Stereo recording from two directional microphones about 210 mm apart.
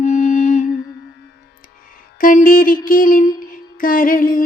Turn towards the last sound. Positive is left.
turn(degrees=40)  # may be behind; listen again after turning